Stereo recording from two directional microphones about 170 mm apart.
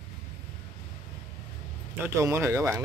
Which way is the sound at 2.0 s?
15° right (ahead or behind).